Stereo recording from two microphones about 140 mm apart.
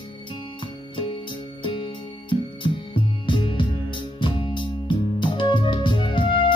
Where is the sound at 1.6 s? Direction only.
35° left (ahead or behind).